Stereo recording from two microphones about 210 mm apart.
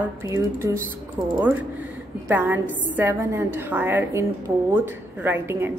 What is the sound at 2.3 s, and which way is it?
A woman's voice, 10° right (ahead or behind).